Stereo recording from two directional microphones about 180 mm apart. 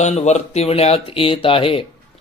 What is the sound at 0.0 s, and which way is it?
Speech, 40° left (ahead or behind).